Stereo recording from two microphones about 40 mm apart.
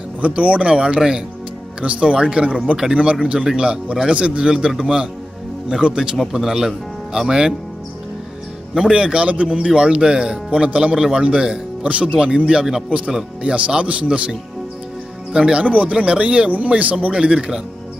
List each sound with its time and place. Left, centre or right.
0.2 s speech: right
0.9 s speech: centre
1.8 s speech: right
3.3 s speech: centre
8.8 s speech: right
9.3 s speech: right
9.6 s speech: right
10.5 s speech: right
11.8 s speech: right; by 12.8 s centre
13.4 s speech: right
15.3 s speech: right
15.6 s speech: right